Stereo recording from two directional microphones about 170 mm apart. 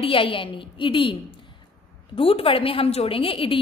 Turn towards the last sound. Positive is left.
turn(degrees=30)  # may be behind; listen again after turning